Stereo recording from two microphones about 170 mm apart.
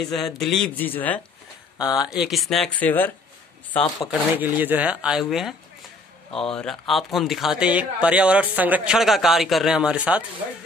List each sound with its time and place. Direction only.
0.0 s speech: centre (ahead or behind)
1.8 s speech: 25° left (ahead or behind)
2.0 s speech: 5° right (ahead or behind)
4.4 s speech: 10° right (ahead or behind)